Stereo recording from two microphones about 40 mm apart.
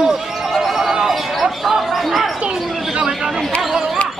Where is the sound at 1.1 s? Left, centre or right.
Centre.